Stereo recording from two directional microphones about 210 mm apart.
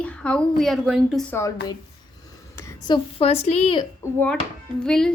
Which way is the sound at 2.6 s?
15° left (ahead or behind).